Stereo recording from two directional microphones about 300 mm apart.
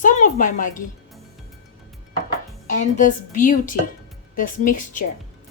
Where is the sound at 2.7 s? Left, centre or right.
Left.